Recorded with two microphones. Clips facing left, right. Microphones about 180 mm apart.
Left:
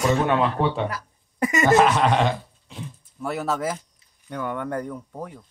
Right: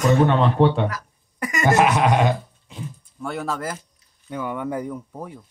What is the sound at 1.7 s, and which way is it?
Speech, 10° right (ahead or behind).